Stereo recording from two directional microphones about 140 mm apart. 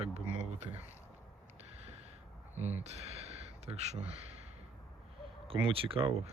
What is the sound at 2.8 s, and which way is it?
Speech, 45° right (ahead or behind).